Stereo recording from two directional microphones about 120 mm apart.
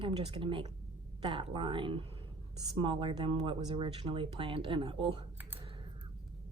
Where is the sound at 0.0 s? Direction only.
45° right (ahead or behind).